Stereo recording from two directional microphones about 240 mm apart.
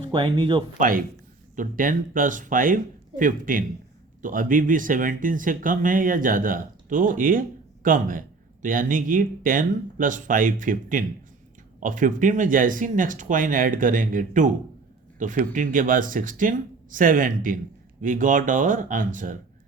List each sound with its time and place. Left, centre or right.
0.1 s speech: centre
0.8 s speech: right